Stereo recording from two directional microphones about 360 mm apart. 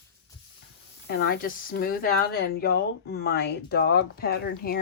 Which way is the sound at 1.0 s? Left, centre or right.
Left.